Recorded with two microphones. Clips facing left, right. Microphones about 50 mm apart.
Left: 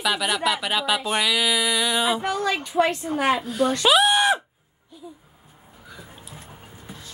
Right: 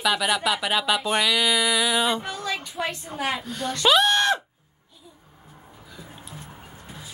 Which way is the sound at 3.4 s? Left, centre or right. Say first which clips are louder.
Left 4 dB; centre.